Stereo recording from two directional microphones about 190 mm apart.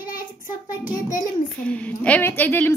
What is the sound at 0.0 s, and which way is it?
Child singing, 45° left (ahead or behind).